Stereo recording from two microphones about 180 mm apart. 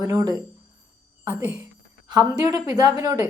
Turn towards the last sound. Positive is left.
turn(degrees=-20)  # may be behind; listen again after turning